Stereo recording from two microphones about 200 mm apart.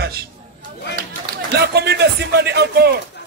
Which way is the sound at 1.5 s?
55° right (ahead or behind).